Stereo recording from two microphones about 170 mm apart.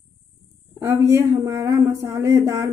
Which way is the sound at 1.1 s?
15° right (ahead or behind).